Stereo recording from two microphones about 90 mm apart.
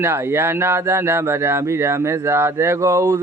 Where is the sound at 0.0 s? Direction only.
30° right (ahead or behind).